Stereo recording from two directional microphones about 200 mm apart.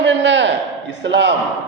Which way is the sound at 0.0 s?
65° right (ahead or behind).